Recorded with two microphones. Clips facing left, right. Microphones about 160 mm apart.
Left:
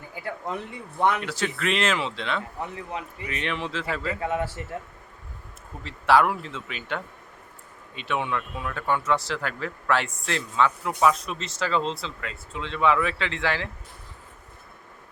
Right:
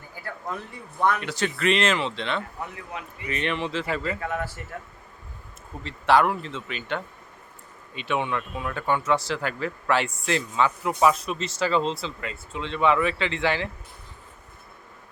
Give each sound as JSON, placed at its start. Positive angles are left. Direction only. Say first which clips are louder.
{"t": 0.1, "sound": "a man's voice", "louder": "left 2 dB", "side_deg": 20}
{"t": 1.2, "sound": "speech", "louder": "right 2 dB", "side_deg": 0}
{"t": 2.6, "sound": "a man's voice", "louder": "left 3 dB", "side_deg": 30}
{"t": 3.2, "sound": "speech", "louder": "right 4 dB", "side_deg": 0}
{"t": 4.2, "sound": "a man's voice", "louder": "left 3 dB", "side_deg": 25}
{"t": 5.8, "sound": "speech", "louder": "even", "side_deg": 5}